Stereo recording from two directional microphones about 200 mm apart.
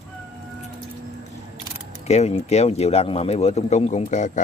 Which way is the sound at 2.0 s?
35° left (ahead or behind).